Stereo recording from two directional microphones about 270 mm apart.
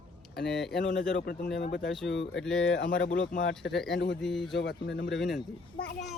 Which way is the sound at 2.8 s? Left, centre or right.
Left.